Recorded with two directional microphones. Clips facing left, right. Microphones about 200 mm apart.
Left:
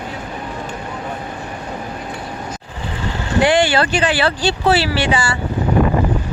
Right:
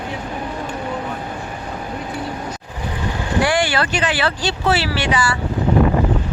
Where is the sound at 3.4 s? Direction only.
25° left (ahead or behind).